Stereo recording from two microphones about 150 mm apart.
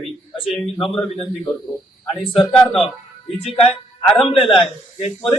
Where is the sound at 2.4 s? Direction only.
5° left (ahead or behind).